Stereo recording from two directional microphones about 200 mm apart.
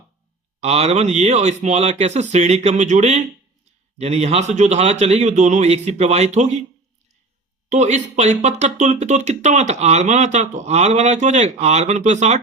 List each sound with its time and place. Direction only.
0.6 s speech: 35° right (ahead or behind)
7.7 s speech: 35° right (ahead or behind)